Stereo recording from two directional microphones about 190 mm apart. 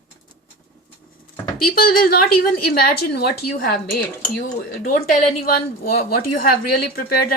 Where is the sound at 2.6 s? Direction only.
55° left (ahead or behind).